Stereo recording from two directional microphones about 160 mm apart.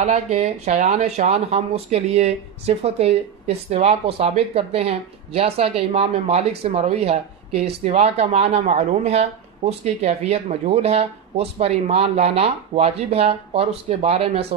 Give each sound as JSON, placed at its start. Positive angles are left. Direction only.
{"t": 0.0, "sound": "speech", "side_deg": -45}